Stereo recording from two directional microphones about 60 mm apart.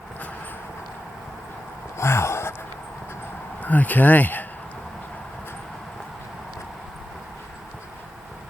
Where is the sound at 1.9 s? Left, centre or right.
Left.